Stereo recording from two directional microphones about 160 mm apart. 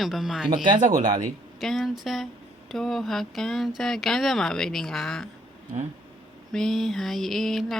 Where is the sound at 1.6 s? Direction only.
Centre (ahead or behind).